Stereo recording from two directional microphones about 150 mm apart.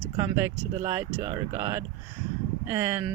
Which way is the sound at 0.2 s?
20° right (ahead or behind).